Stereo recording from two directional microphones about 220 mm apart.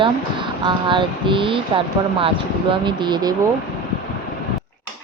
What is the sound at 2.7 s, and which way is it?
Speech, 20° right (ahead or behind).